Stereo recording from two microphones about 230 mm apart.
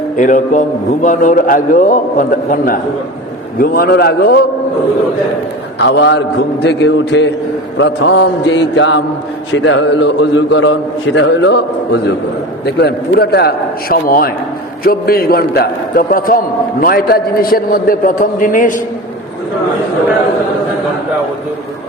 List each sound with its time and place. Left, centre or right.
0.2 s a man's voice: left
5.8 s a man's voice: left
12.7 s a man's voice: left